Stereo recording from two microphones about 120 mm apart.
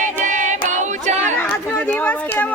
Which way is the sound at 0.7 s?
80° right.